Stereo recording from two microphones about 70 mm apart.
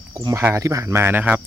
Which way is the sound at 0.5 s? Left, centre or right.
Right.